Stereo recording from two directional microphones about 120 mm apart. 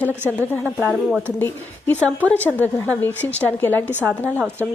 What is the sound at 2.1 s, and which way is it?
A woman's voice, 10° left (ahead or behind).